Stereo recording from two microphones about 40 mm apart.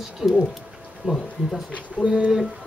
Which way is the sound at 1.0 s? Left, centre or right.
Centre.